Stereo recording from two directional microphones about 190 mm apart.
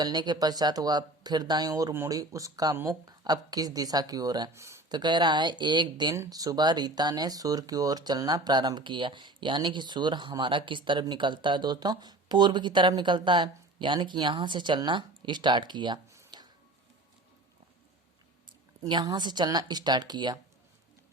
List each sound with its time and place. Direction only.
0.0 s speech: 20° right (ahead or behind)
18.8 s speech: 20° right (ahead or behind)